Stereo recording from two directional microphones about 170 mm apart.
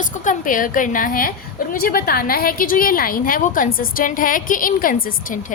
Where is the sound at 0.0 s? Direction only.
50° left (ahead or behind).